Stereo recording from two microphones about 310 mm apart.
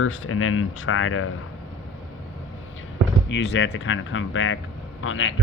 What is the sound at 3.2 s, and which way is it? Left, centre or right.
Speech, left.